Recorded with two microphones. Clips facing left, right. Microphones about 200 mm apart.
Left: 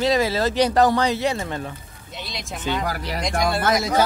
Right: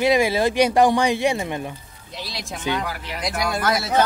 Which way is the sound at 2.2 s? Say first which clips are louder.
Right 1 dB; centre (ahead or behind).